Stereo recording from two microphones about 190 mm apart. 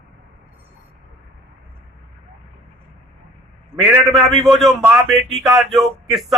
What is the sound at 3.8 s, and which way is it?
Speech, centre (ahead or behind).